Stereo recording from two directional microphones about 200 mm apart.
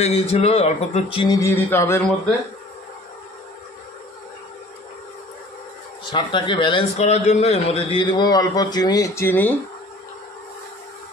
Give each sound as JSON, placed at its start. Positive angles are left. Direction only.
{"t": 0.0, "sound": "speech", "side_deg": 30}
{"t": 6.0, "sound": "speech", "side_deg": 25}